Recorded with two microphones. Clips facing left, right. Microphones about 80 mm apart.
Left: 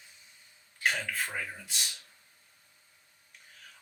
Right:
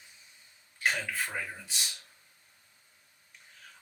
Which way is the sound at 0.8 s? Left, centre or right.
Centre.